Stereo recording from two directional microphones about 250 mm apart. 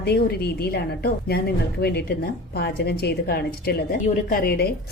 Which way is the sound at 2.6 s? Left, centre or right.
Left.